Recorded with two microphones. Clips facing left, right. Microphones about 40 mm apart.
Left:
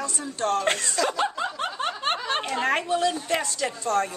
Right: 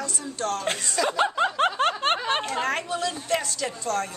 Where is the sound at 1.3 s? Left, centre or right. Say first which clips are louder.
Right 6 dB; right.